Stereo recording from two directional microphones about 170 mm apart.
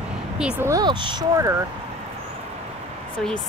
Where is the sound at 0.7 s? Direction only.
25° right (ahead or behind).